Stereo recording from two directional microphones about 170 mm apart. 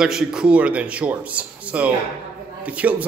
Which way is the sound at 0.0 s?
5° right (ahead or behind).